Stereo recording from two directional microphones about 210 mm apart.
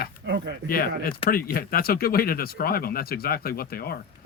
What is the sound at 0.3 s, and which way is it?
Speech, 55° right (ahead or behind).